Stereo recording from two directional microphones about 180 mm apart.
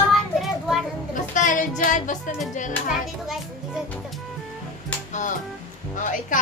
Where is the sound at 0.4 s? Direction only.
Centre (ahead or behind).